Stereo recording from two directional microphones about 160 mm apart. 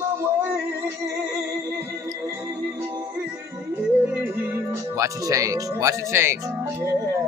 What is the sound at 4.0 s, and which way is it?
Music, 15° right (ahead or behind).